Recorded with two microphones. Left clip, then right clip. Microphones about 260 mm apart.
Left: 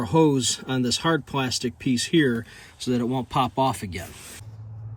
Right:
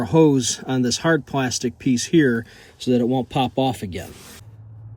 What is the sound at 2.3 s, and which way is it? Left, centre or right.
Speech, centre.